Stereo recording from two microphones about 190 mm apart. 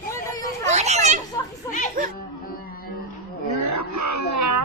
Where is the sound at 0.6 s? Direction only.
35° right (ahead or behind).